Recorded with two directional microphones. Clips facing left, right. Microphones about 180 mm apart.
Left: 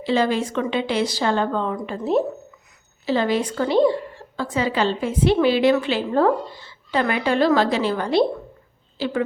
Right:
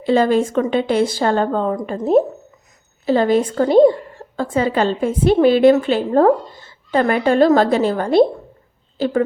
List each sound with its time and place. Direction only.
0.0 s a woman's voice: 50° right (ahead or behind)